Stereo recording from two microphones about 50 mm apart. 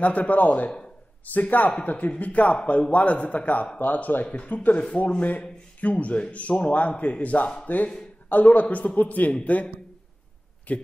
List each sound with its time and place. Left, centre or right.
0.0 s a man's voice: left
10.7 s a man's voice: left